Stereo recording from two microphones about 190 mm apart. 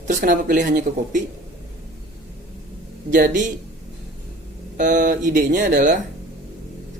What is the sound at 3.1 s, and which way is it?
Speech, 45° right (ahead or behind).